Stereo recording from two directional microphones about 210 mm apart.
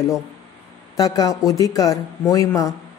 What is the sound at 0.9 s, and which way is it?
Speech, 15° left (ahead or behind).